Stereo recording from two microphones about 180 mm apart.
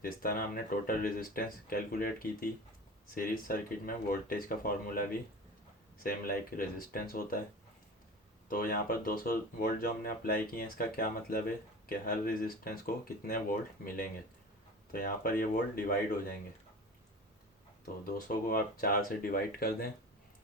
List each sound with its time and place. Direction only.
0.0 s speech: 55° left (ahead or behind)
8.4 s speech: 55° left (ahead or behind)
18.0 s speech: 55° left (ahead or behind)